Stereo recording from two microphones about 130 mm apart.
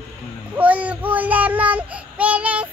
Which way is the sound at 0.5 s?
10° right (ahead or behind).